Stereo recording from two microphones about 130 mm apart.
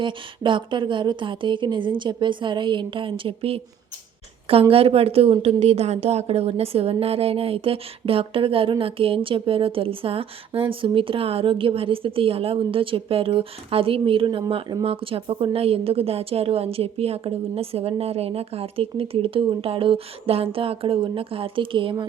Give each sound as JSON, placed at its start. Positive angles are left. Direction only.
{"t": 0.0, "sound": "a woman's voice", "side_deg": -40}
{"t": 4.7, "sound": "a woman's voice", "side_deg": -50}